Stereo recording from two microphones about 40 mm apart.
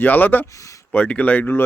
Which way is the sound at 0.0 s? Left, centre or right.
Left.